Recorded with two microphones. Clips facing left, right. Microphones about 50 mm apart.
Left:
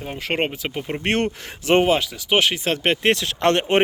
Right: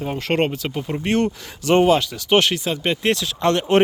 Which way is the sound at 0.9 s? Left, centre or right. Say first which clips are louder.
Right 2 dB; left.